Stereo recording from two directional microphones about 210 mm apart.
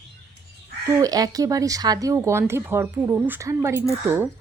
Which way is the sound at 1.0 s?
15° right (ahead or behind).